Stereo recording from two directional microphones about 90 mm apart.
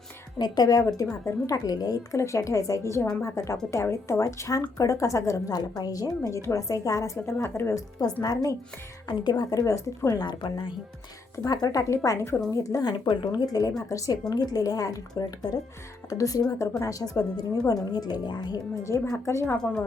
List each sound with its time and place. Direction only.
0.3 s a woman's voice: 50° left (ahead or behind); by 7.7 s 30° left (ahead or behind)
7.7 s speech: 45° left (ahead or behind)
10.2 s speech: 55° left (ahead or behind)
11.4 s a woman's voice: 45° left (ahead or behind)
12.8 s a woman's voice: 50° left (ahead or behind)
18.8 s a woman's voice: 30° left (ahead or behind)
19.5 s a woman's voice: 10° left (ahead or behind)